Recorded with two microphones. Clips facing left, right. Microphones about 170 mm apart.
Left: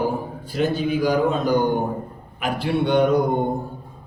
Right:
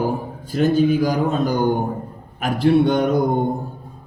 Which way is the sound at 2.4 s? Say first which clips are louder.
Right 6 dB; 45° right (ahead or behind).